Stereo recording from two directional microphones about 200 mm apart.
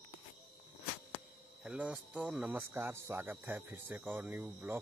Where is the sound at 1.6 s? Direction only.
5° right (ahead or behind).